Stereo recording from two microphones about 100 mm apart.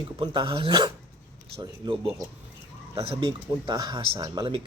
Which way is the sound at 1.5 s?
70° right (ahead or behind).